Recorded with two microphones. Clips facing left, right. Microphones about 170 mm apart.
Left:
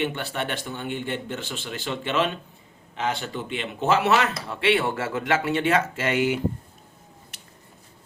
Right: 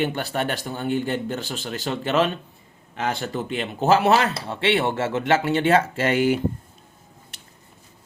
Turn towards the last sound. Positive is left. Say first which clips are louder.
# right 3 dB
turn(degrees=-35)  # may be behind; listen again after turning